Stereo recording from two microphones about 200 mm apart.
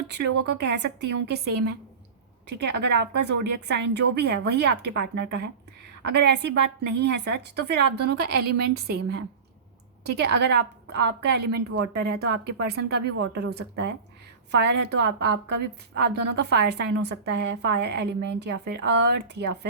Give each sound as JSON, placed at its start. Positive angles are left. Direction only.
{"t": 0.1, "sound": "a woman's voice", "side_deg": -55}